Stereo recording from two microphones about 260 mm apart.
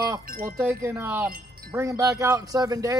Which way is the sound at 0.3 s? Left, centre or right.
Right.